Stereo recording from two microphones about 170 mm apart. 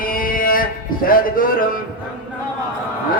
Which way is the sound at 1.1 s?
55° left (ahead or behind).